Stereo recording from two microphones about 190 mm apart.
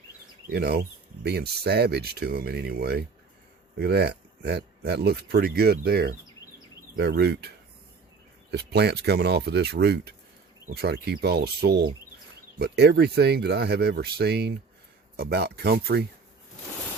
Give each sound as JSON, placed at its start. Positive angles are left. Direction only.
{"t": 0.5, "sound": "speech", "side_deg": -60}